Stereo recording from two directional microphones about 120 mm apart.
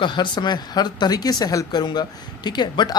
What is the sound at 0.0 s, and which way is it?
Speech, 40° left (ahead or behind).